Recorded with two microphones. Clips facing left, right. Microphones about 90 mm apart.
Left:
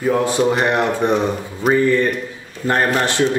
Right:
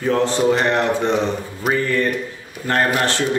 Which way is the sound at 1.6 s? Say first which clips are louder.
Left 4 dB; centre (ahead or behind).